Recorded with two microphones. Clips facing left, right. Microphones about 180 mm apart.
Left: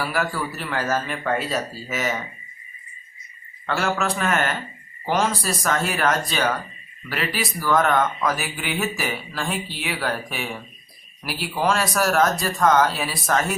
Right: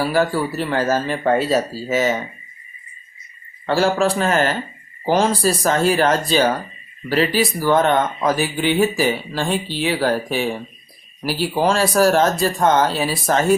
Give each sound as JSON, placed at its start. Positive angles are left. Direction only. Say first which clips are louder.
{"t": 0.0, "sound": "speech", "louder": "right 7 dB", "side_deg": -30}
{"t": 3.7, "sound": "speech", "louder": "right 7 dB", "side_deg": -30}